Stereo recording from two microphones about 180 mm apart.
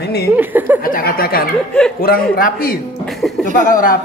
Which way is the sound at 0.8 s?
55° left (ahead or behind).